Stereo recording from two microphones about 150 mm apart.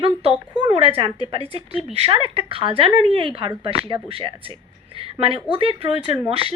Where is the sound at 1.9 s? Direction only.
40° right (ahead or behind).